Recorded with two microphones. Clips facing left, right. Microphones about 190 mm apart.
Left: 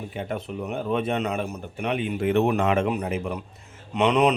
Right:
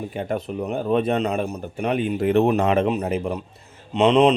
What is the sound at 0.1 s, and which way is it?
A man's voice, 40° right (ahead or behind).